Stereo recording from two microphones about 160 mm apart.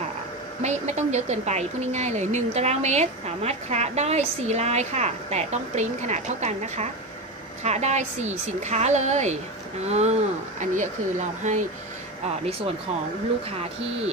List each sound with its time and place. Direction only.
0.6 s a woman's voice: 45° right (ahead or behind)
13.5 s speech: 40° right (ahead or behind)